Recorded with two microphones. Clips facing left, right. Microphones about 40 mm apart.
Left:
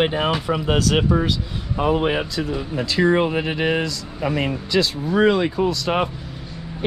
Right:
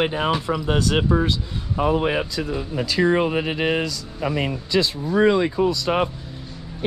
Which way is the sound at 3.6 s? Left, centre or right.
Left.